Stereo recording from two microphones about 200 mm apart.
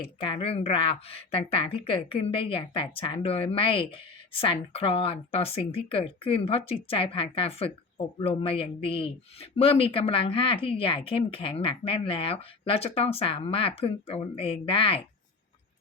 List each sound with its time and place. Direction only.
0.0 s a woman's voice: 25° left (ahead or behind)